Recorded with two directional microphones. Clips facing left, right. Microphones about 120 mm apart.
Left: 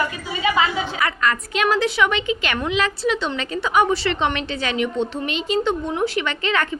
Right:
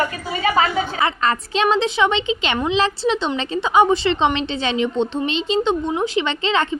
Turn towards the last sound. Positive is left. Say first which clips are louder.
# right 3 dB
turn(degrees=-20)  # may be behind; listen again after turning